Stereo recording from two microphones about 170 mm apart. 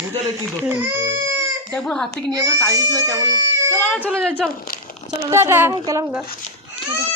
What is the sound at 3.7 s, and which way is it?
Speech, 10° left (ahead or behind).